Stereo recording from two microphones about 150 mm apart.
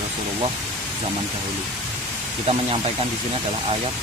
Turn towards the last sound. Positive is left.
turn(degrees=-40)  # may be behind; listen again after turning